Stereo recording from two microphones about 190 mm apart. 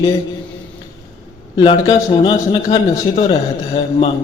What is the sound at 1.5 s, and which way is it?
A man's voice, 25° left (ahead or behind).